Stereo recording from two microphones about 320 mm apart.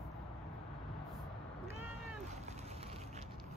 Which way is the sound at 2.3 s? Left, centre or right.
Right.